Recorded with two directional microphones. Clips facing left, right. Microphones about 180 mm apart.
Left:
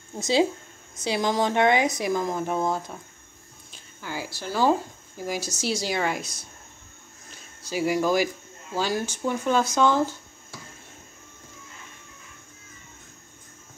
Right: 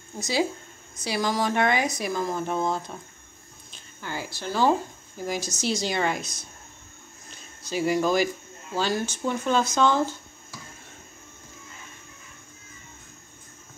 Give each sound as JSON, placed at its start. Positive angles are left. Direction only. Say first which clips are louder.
{"t": 0.2, "sound": "speech", "louder": "left 4 dB", "side_deg": 25}